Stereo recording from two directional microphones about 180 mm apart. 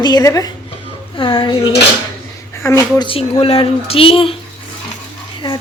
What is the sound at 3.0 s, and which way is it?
Speech, 25° left (ahead or behind).